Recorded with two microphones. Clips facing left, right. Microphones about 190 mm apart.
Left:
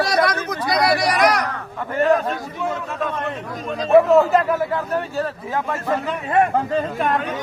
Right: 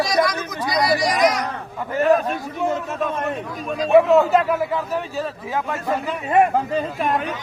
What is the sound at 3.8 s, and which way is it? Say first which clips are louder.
A man's voice: left 1 dB; centre (ahead or behind).